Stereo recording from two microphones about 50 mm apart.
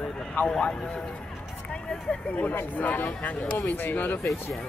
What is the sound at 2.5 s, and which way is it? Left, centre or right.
Speech, left.